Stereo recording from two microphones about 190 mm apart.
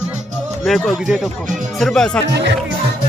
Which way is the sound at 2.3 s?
65° right (ahead or behind).